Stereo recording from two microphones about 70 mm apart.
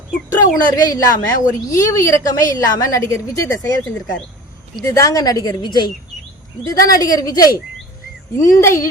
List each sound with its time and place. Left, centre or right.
0.3 s a woman's voice: left
2.2 s a woman's voice: left
2.9 s a woman's voice: left
6.7 s a woman's voice: left
8.4 s a woman's voice: left